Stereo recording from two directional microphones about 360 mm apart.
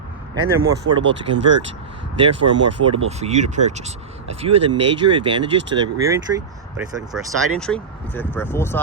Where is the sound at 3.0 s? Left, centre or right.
Centre.